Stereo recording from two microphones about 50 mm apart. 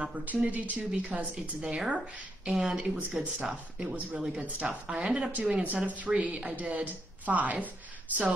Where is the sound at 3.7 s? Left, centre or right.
Right.